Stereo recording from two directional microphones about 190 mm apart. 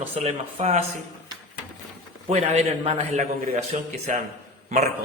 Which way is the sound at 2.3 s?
35° right (ahead or behind).